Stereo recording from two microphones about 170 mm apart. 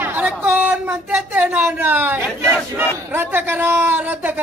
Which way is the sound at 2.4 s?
15° right (ahead or behind).